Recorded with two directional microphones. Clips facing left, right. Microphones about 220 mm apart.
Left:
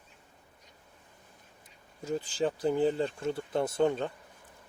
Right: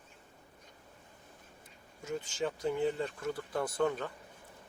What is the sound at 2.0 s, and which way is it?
Speech, 35° left (ahead or behind).